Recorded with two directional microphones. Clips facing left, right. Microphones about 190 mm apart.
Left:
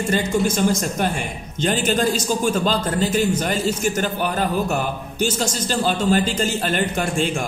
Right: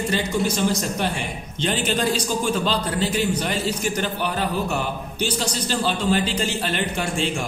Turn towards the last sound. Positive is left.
turn(degrees=45)  # may be behind; listen again after turning